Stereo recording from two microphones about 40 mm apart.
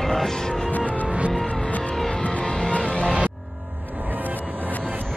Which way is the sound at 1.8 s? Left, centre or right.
Centre.